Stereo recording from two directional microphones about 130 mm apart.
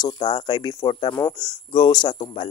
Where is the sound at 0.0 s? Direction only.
35° left (ahead or behind).